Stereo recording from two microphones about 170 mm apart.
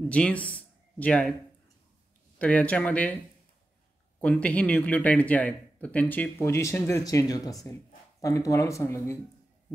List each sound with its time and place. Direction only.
0.1 s speech: 5° left (ahead or behind)
2.3 s speech: 10° left (ahead or behind)
4.2 s speech: 10° left (ahead or behind)